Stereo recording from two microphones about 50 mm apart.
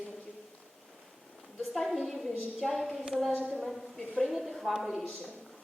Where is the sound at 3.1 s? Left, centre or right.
Centre.